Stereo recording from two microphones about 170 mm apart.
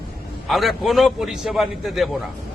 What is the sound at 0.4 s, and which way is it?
A man's voice, centre (ahead or behind).